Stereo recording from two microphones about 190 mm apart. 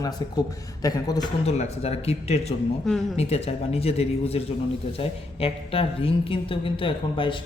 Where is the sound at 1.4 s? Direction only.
35° left (ahead or behind).